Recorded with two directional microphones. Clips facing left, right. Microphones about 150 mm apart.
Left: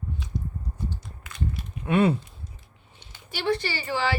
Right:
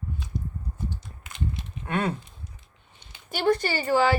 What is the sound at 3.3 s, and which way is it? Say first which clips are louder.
Speech: right 3 dB; 45° right (ahead or behind).